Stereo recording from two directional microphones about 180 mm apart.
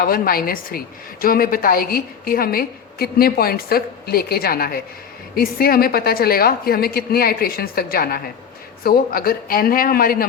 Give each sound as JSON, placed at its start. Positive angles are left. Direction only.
{"t": 0.0, "sound": "a woman's voice", "side_deg": 55}